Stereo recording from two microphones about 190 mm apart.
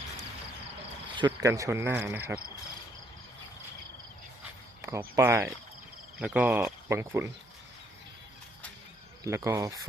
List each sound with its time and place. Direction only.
1.1 s speech: 20° right (ahead or behind)
4.9 s speech: 10° right (ahead or behind)
9.2 s speech: 15° right (ahead or behind)